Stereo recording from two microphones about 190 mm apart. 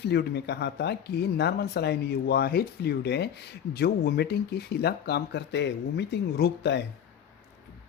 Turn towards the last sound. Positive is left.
turn(degrees=60)  # may be behind; listen again after turning